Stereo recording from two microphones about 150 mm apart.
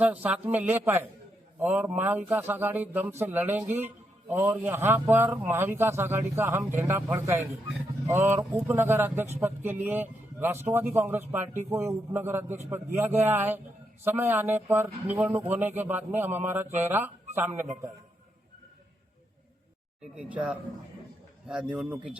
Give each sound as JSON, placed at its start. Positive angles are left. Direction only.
{"t": 0.0, "sound": "a man's voice", "side_deg": -10}
{"t": 20.3, "sound": "a man's voice", "side_deg": -10}